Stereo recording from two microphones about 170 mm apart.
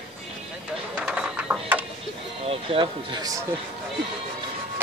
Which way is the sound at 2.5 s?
30° right (ahead or behind).